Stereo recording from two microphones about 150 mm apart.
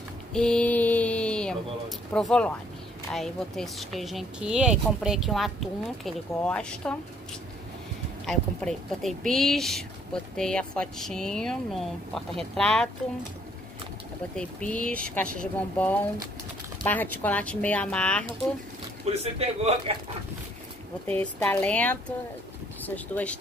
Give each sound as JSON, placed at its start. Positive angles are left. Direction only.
{"t": 0.3, "sound": "a sound", "side_deg": 5}
{"t": 2.1, "sound": "speech", "side_deg": 5}
{"t": 8.3, "sound": "speech", "side_deg": 5}
{"t": 14.3, "sound": "speech", "side_deg": 10}
{"t": 19.0, "sound": "a man's voice", "side_deg": -40}
{"t": 21.1, "sound": "speech", "side_deg": 10}